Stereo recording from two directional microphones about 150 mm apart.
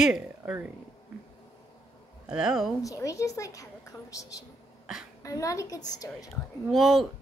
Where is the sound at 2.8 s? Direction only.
20° left (ahead or behind).